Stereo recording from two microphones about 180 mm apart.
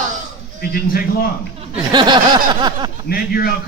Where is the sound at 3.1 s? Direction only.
60° left (ahead or behind).